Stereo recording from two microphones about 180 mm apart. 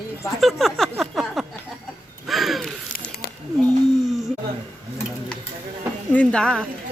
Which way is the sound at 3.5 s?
Centre (ahead or behind).